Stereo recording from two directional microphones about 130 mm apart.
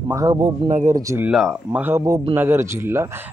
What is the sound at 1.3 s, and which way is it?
Speech, 5° right (ahead or behind).